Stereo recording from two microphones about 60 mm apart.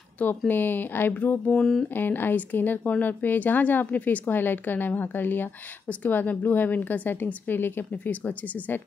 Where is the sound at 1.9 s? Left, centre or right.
Left.